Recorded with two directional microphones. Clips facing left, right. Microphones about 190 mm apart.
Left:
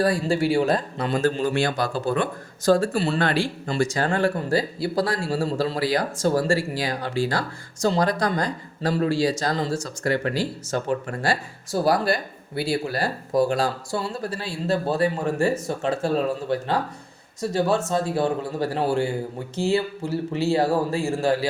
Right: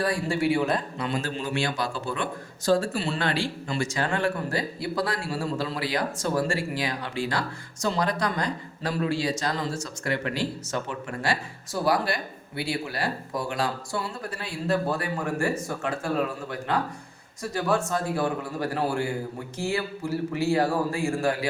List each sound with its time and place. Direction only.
0.0 s a man's voice: 35° left (ahead or behind)